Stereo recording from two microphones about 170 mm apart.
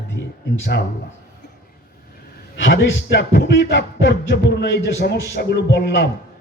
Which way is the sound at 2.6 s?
80° left.